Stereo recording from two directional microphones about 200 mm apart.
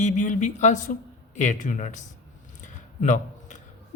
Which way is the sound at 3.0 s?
40° left (ahead or behind).